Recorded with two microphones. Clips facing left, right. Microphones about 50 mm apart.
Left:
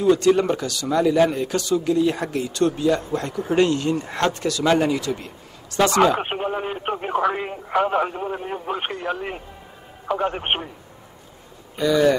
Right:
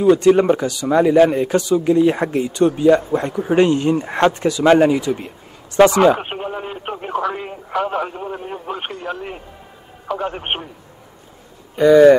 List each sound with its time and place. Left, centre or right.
0.0 s speech: right
6.1 s speech: centre
11.8 s speech: right